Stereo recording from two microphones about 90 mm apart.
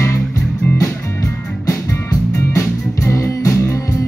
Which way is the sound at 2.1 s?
35° left (ahead or behind).